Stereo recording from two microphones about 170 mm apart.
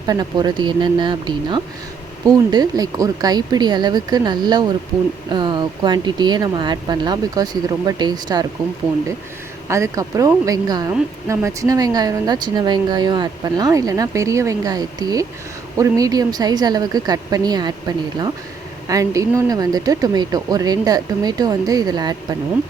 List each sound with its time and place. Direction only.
0.1 s speech: 25° right (ahead or behind)
9.6 s speech: 15° right (ahead or behind)